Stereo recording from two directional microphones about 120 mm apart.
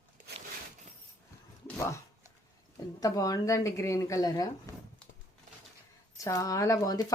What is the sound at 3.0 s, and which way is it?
Speech, 30° left (ahead or behind).